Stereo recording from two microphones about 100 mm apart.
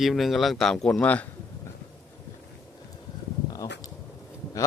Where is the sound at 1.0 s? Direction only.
15° left (ahead or behind).